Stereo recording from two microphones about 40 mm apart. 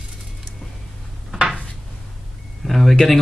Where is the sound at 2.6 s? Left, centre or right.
Centre.